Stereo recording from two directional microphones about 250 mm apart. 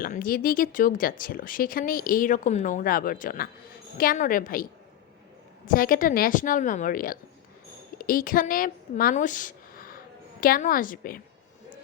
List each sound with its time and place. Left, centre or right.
0.0 s speech: left
5.6 s speech: left